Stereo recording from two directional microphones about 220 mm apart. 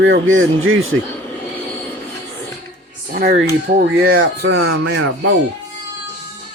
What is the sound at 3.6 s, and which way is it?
Speech, 45° right (ahead or behind).